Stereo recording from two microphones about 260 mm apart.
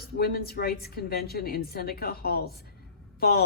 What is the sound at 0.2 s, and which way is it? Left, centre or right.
A woman's voice, left.